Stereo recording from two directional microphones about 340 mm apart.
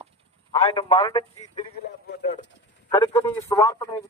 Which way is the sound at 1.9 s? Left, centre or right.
Left.